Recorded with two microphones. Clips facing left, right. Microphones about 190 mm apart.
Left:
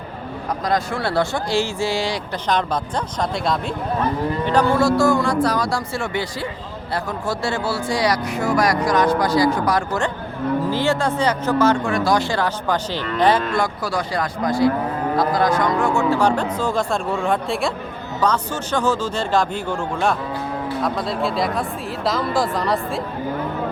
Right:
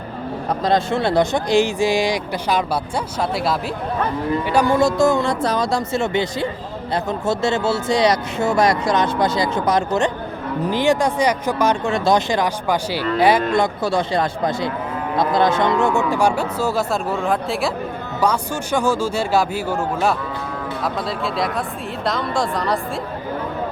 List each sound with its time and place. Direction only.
0.6 s speech: 25° right (ahead or behind); by 13.4 s 10° right (ahead or behind)
13.5 s speech: 25° right (ahead or behind); by 22.8 s centre (ahead or behind)